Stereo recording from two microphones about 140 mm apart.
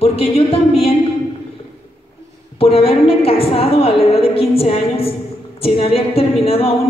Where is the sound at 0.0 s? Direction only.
45° left (ahead or behind).